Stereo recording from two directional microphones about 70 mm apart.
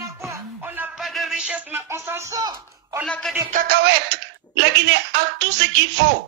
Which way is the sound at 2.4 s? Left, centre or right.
Right.